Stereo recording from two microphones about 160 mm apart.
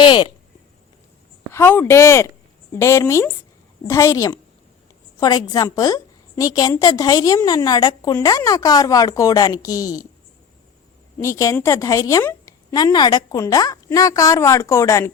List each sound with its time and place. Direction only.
0.0 s a sound: 30° left (ahead or behind)
1.5 s a woman's voice: 15° left (ahead or behind)
11.2 s a woman's voice: 20° left (ahead or behind)